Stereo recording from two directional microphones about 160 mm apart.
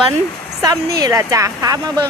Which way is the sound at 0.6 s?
20° right (ahead or behind).